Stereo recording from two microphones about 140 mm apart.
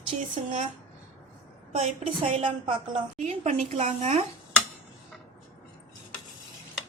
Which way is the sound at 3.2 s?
55° right (ahead or behind).